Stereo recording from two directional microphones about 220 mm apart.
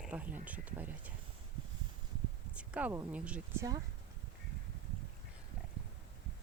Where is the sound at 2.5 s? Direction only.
5° right (ahead or behind).